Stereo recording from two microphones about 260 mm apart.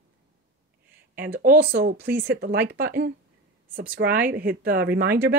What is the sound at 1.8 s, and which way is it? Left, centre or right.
Speech, right.